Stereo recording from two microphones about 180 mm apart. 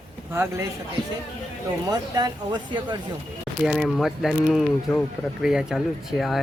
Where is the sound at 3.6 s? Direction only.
5° right (ahead or behind).